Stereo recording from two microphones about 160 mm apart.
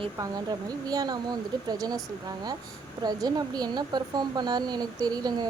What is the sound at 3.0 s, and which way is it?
Speech, 25° right (ahead or behind).